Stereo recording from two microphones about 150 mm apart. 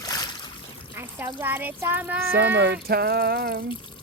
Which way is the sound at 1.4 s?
10° right (ahead or behind).